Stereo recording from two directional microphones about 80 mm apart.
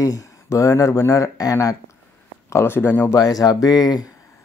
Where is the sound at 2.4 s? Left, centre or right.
Left.